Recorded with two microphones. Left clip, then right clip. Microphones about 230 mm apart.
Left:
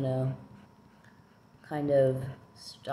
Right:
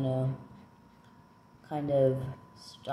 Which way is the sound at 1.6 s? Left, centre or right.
Centre.